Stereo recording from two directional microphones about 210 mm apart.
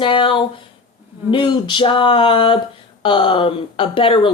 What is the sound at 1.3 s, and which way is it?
Speech, 20° left (ahead or behind).